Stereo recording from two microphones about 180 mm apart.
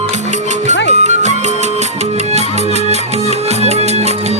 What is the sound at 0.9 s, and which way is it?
Music, 40° right (ahead or behind).